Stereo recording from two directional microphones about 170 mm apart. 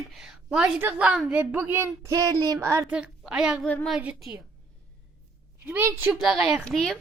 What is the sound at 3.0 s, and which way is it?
Speech, 5° right (ahead or behind).